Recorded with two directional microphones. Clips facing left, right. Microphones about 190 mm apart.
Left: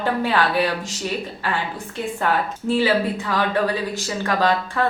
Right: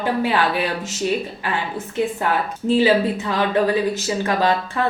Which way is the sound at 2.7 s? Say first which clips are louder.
Right 3 dB; 20° right (ahead or behind).